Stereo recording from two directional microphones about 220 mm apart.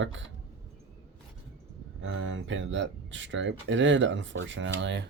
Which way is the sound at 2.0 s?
60° right (ahead or behind).